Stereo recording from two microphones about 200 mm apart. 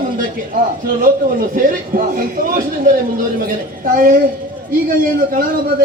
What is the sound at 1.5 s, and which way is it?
Speech, 45° right (ahead or behind).